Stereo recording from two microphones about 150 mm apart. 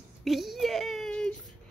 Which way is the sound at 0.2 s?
Centre (ahead or behind).